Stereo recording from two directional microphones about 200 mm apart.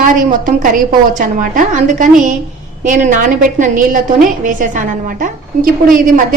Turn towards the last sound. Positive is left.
turn(degrees=-45)  # may be behind; listen again after turning